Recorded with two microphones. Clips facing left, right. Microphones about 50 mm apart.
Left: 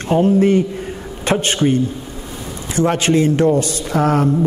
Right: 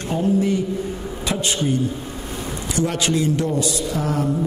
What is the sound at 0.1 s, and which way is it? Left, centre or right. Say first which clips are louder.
A man's voice: left 7 dB; left.